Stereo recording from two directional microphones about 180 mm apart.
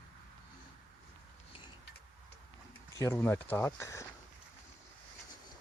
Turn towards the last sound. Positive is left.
turn(degrees=15)  # may be behind; listen again after turning